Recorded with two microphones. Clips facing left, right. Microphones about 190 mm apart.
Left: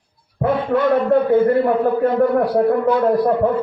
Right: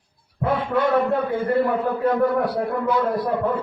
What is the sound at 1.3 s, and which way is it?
A man's voice, 55° left (ahead or behind).